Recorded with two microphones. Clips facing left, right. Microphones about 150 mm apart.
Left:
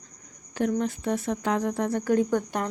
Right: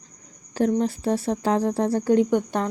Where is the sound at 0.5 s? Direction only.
35° right (ahead or behind).